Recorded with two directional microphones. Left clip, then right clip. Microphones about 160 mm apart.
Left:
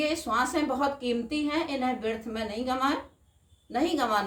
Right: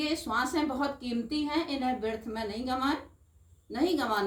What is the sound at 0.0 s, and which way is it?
A woman's voice, 25° left (ahead or behind).